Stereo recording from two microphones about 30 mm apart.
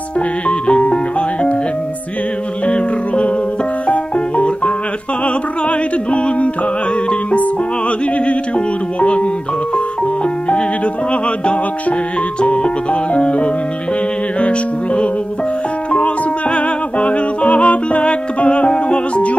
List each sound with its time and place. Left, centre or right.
0.5 s music: left
2.6 s music: left
8.3 s music: left
12.4 s music: left